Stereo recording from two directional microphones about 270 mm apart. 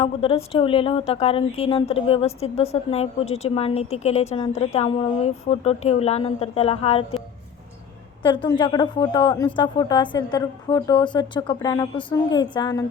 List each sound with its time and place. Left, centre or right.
0.0 s a woman's voice: left
8.2 s a woman's voice: centre